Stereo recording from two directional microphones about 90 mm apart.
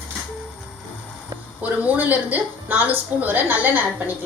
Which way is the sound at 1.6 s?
15° right (ahead or behind).